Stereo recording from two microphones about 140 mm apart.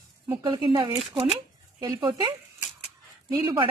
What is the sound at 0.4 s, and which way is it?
Speech, 30° right (ahead or behind).